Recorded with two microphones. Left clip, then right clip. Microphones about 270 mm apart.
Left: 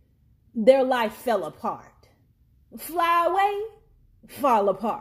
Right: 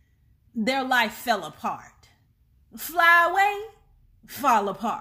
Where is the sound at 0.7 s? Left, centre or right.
Right.